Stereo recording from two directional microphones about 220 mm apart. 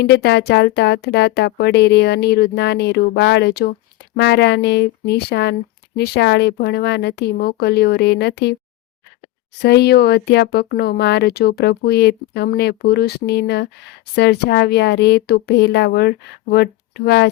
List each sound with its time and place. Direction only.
0.0 s speech: 50° left (ahead or behind)
9.6 s speech: 50° left (ahead or behind)